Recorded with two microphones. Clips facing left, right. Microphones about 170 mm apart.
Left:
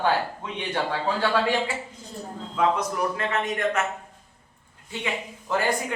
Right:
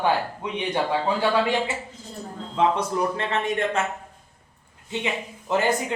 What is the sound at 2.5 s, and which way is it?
Speech, 25° right (ahead or behind).